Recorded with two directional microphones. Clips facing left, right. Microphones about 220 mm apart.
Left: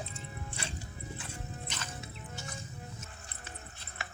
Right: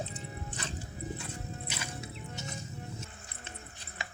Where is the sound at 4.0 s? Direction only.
15° right (ahead or behind).